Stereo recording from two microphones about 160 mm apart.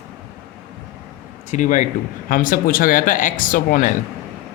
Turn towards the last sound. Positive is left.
turn(degrees=60)  # may be behind; listen again after turning